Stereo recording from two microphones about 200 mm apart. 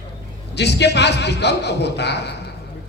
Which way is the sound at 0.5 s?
55° left (ahead or behind).